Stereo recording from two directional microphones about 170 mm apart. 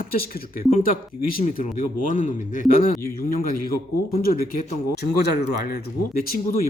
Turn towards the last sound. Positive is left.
turn(degrees=60)  # may be behind; listen again after turning